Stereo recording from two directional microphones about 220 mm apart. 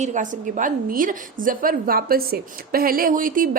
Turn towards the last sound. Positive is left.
turn(degrees=-40)  # may be behind; listen again after turning